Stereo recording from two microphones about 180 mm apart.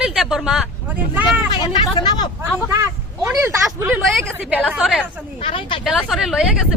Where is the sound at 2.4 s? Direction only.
15° right (ahead or behind).